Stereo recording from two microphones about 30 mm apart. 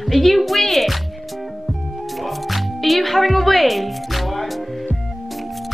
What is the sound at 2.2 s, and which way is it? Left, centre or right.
Music, centre.